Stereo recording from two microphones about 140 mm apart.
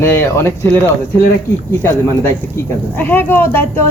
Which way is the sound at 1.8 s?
20° left (ahead or behind).